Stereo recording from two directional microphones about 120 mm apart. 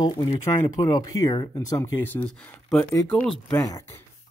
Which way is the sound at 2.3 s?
5° left (ahead or behind).